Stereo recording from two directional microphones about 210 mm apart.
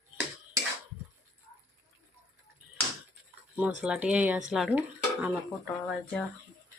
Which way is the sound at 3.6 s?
5° right (ahead or behind).